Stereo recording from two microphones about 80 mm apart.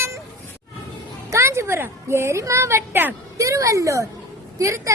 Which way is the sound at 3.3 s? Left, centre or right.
Right.